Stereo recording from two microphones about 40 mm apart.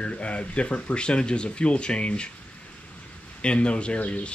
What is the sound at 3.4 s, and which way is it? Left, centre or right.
Speech, left.